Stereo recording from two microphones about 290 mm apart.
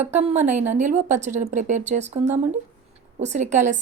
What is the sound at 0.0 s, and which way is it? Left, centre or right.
A woman's voice, right.